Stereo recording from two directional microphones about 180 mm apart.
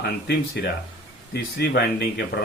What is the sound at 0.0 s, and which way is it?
Speech, 65° left (ahead or behind).